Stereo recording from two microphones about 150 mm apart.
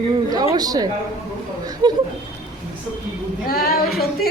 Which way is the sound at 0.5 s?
25° right (ahead or behind).